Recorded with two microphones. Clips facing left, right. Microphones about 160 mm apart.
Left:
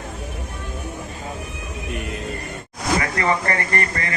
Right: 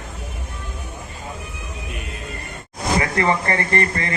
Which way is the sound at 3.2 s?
25° right (ahead or behind).